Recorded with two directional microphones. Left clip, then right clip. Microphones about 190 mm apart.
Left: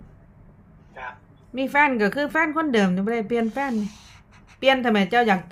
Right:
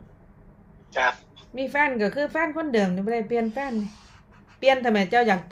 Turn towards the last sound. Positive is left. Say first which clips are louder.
# left 1 dB
turn(degrees=15)  # may be behind; listen again after turning